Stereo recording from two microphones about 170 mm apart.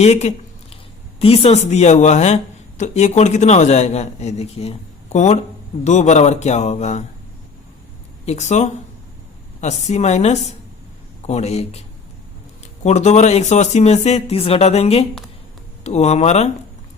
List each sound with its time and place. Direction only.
0.0 s a sound: 40° left (ahead or behind)
1.2 s speech: 35° left (ahead or behind)
8.2 s speech: 40° left (ahead or behind)
12.8 s speech: 40° left (ahead or behind)